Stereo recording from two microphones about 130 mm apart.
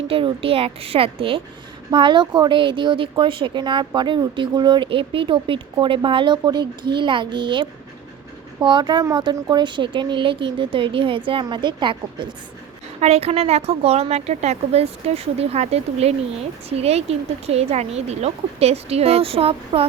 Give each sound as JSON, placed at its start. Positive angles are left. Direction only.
{"t": 0.1, "sound": "a woman's voice", "side_deg": -45}
{"t": 13.0, "sound": "a woman's voice", "side_deg": -50}